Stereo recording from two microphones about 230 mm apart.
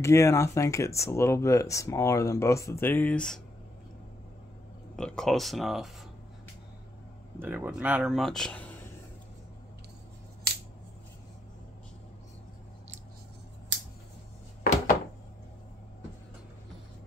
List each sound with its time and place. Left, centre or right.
0.0 s speech: centre
4.9 s speech: centre
7.3 s speech: centre
10.5 s scissors: right